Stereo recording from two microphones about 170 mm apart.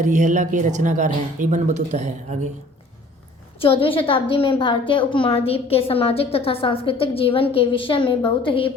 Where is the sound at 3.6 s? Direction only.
35° left (ahead or behind).